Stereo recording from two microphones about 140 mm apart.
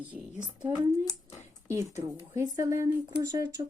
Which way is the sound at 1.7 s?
20° right (ahead or behind).